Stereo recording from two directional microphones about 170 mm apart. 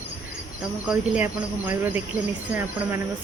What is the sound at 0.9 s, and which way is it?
Speech, 5° right (ahead or behind).